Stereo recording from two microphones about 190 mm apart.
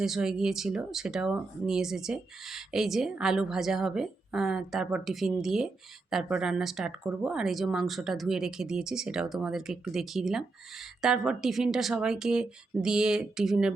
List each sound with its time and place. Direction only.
0.0 s speech: 5° right (ahead or behind)